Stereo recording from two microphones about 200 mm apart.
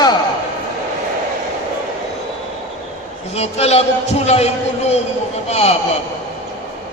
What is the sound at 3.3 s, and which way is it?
A man's voice, 30° left (ahead or behind).